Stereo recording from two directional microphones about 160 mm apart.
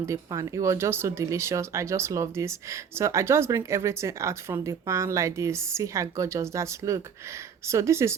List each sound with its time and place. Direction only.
0.0 s speech: 20° right (ahead or behind)